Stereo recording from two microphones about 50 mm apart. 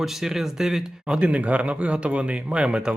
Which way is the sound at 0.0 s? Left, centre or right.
Centre.